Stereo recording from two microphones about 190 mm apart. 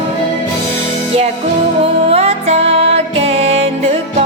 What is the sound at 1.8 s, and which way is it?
Music, 30° right (ahead or behind).